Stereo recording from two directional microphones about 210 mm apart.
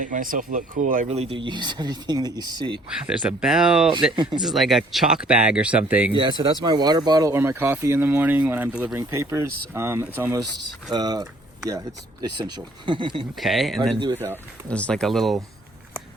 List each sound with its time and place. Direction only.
0.0 s speech: 40° right (ahead or behind); by 2.8 s 20° right (ahead or behind)
3.1 s speech: 5° right (ahead or behind)
4.1 s speech: 20° right (ahead or behind)
4.4 s speech: centre (ahead or behind)
6.1 s speech: 20° right (ahead or behind)
13.4 s speech: centre (ahead or behind)
14.1 s speech: 10° right (ahead or behind)
14.7 s speech: 5° left (ahead or behind)